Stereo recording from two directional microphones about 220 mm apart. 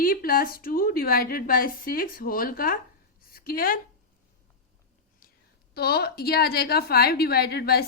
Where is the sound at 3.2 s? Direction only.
40° left (ahead or behind).